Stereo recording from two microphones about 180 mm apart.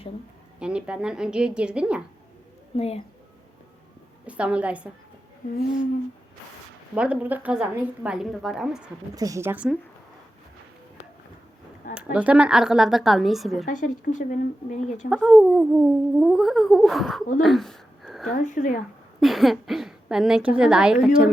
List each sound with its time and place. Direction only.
0.6 s speech: 5° right (ahead or behind)
2.7 s speech: 35° left (ahead or behind)
4.3 s a woman's voice: 5° right (ahead or behind)
6.9 s speech: 5° right (ahead or behind)
9.1 s a woman's voice: 20° right (ahead or behind)
12.1 s speech: 5° right (ahead or behind)
13.7 s speech: 45° left (ahead or behind)
15.1 s speech: centre (ahead or behind)
17.4 s a sound: centre (ahead or behind)
18.3 s speech: 45° left (ahead or behind)
19.2 s speech: centre (ahead or behind)